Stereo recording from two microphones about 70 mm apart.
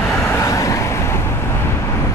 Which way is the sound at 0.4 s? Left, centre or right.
Left.